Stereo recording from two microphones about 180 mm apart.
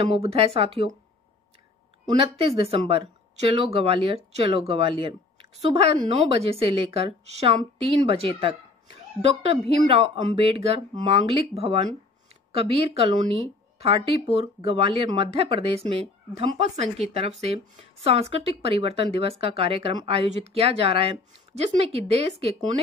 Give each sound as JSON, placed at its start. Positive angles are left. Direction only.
{"t": 0.2, "sound": "speech", "side_deg": -35}
{"t": 2.1, "sound": "speech", "side_deg": -30}